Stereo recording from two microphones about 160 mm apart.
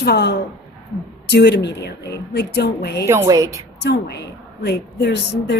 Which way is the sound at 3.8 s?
90° left.